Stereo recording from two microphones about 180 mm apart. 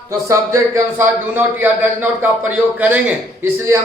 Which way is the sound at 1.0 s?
10° right (ahead or behind).